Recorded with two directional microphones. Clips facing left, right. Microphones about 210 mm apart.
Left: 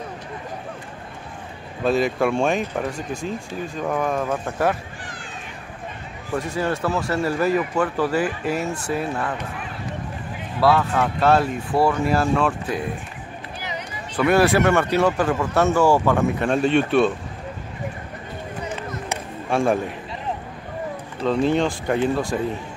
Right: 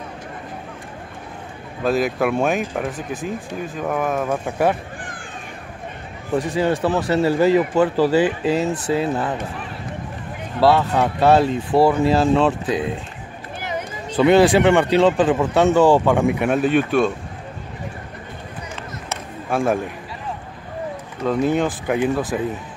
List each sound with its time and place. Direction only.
1.9 s speech: centre (ahead or behind)
6.3 s speech: 20° right (ahead or behind)
10.8 s speech: 20° right (ahead or behind)
13.6 s a sound: 50° right (ahead or behind)
14.1 s speech: 20° right (ahead or behind); by 17.1 s centre (ahead or behind)
19.5 s speech: centre (ahead or behind)
21.2 s speech: 5° right (ahead or behind)